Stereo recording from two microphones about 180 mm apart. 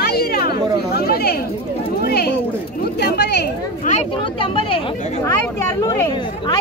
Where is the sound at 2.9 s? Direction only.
65° left (ahead or behind).